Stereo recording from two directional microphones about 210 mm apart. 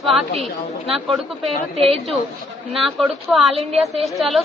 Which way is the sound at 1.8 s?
30° right (ahead or behind).